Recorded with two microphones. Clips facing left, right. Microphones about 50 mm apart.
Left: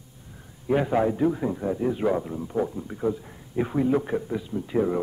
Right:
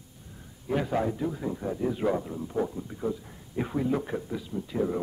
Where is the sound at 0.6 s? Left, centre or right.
Centre.